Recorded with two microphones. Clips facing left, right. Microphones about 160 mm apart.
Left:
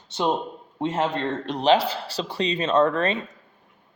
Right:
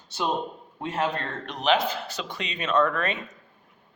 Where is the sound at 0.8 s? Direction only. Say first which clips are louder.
Left 4 dB; 25° left (ahead or behind).